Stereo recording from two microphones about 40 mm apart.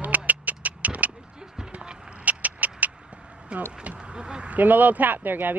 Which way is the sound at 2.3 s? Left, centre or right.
Right.